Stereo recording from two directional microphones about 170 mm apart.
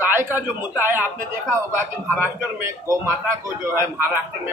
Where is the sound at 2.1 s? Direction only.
15° right (ahead or behind).